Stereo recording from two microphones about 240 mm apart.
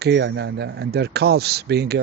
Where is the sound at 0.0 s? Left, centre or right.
Right.